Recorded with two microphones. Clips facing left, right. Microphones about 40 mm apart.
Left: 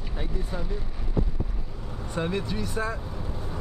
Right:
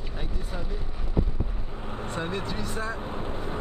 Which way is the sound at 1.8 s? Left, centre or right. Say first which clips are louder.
Left 2 dB; right.